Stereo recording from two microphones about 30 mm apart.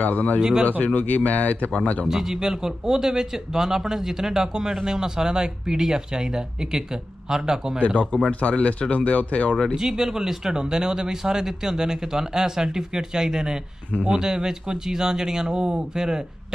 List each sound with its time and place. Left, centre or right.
0.0 s speech: left
0.4 s speech: right
0.7 s speech: left
1.7 s speech: left
2.0 s speech: centre
8.3 s speech: left
9.8 s speech: centre